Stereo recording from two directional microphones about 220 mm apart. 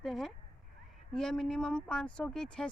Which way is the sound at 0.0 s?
Centre (ahead or behind).